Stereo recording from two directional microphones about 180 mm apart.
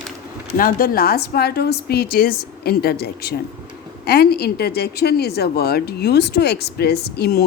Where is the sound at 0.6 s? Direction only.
50° left (ahead or behind).